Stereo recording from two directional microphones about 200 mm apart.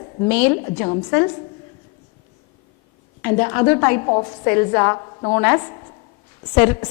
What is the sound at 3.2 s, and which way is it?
Speech, 15° left (ahead or behind).